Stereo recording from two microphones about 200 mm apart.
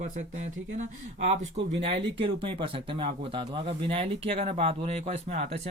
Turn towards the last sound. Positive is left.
turn(degrees=-30)  # may be behind; listen again after turning